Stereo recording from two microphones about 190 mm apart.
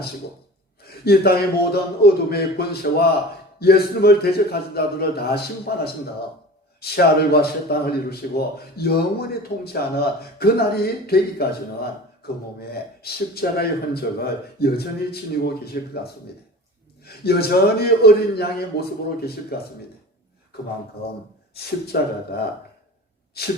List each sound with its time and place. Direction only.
1.0 s speech: 55° left (ahead or behind)
21.0 s speech: 55° left (ahead or behind)